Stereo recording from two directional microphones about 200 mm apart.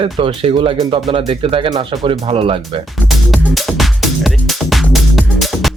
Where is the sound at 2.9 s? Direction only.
Centre (ahead or behind).